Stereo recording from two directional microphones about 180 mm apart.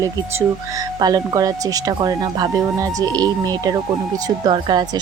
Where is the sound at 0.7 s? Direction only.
20° right (ahead or behind).